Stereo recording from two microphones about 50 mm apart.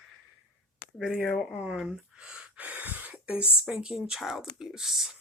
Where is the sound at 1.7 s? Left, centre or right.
Centre.